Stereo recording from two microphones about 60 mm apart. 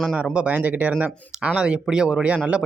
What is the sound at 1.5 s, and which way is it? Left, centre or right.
Speech, centre.